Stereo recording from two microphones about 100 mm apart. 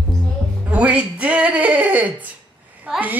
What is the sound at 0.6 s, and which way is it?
Speech, 15° right (ahead or behind).